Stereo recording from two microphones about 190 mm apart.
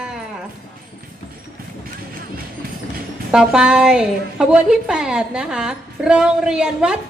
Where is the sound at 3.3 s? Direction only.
5° right (ahead or behind).